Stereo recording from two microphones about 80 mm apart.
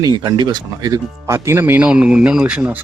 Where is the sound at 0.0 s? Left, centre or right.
Right.